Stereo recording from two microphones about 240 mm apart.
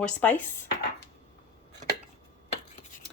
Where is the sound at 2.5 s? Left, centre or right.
Left.